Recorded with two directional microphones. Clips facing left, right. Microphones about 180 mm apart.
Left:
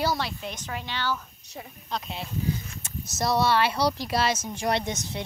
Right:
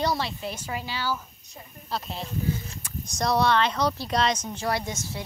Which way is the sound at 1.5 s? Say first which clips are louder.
Left 11 dB; 80° left.